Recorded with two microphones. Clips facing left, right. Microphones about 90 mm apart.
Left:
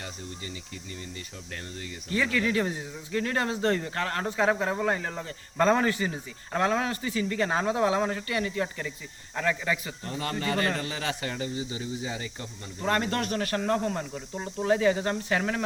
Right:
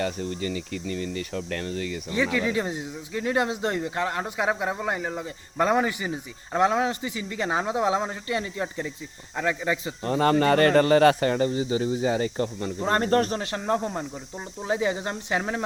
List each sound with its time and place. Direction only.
0.0 s speech: 75° right (ahead or behind); by 2.0 s 90° right
2.1 s speech: 20° right (ahead or behind)
10.0 s speech: 45° right (ahead or behind)
12.8 s speech: 35° right (ahead or behind)
13.4 s speech: 20° right (ahead or behind)